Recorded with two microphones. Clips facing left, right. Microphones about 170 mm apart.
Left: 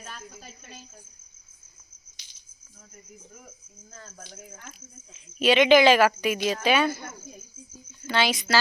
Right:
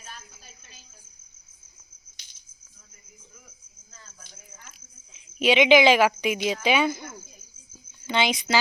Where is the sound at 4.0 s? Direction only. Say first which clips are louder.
Left 8 dB; 50° left (ahead or behind).